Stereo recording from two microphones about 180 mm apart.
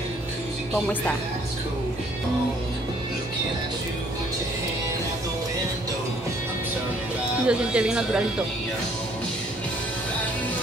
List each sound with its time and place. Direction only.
7.4 s speech: 5° right (ahead or behind)